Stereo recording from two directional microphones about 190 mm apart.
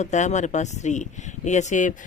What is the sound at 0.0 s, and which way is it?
Speech, 35° left (ahead or behind).